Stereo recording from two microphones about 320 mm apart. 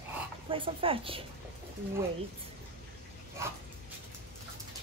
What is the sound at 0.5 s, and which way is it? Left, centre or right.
Speech, centre.